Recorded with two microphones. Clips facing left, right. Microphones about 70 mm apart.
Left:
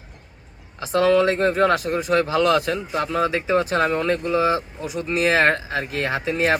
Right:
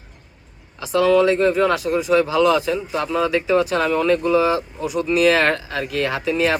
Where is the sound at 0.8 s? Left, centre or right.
Left.